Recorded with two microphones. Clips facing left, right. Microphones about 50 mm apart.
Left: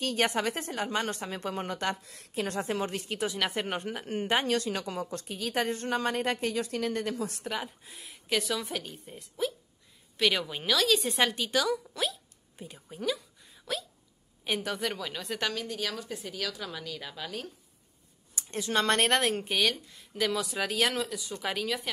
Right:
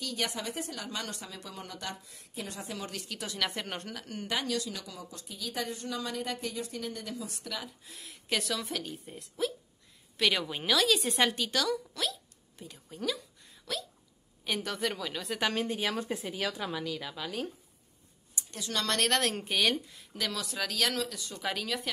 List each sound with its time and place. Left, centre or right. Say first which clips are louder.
0.0 s a woman's voice: left 6 dB; left
0.3 s speech: left 6 dB; left
0.7 s a woman's voice: left 7 dB; left
2.0 s a woman's voice: left 8 dB; left
3.3 s speech: left 3 dB; centre
4.0 s a woman's voice: left 6 dB; left
7.4 s speech: left 5 dB; left
8.0 s speech: left 3 dB; centre
15.5 s a woman's voice: right 3 dB; right
16.2 s speech: right 2 dB; centre
16.7 s speech: right 3 dB; centre
18.5 s speech: left 6 dB; left
19.3 s speech: left 1 dB; centre